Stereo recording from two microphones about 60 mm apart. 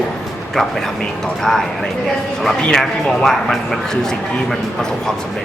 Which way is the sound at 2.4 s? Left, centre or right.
Centre.